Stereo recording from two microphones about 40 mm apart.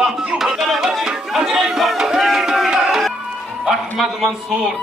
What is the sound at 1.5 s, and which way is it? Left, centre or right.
Music, centre.